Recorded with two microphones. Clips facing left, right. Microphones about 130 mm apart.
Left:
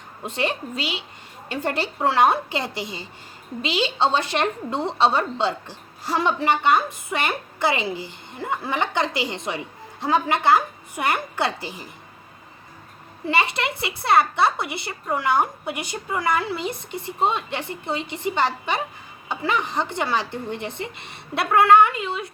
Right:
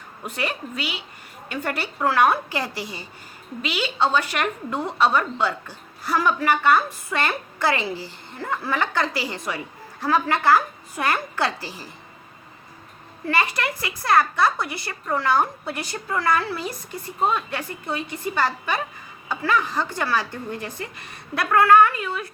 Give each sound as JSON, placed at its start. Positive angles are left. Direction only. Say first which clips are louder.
{"t": 0.2, "sound": "a woman's voice", "louder": "left 3 dB", "side_deg": 25}
{"t": 13.2, "sound": "a woman's voice", "louder": "left 1 dB", "side_deg": 20}